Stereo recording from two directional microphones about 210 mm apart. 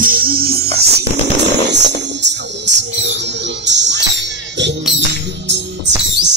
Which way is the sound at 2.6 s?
55° right (ahead or behind).